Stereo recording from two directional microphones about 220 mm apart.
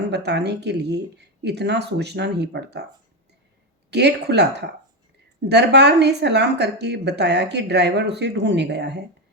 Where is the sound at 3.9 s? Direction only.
50° right (ahead or behind).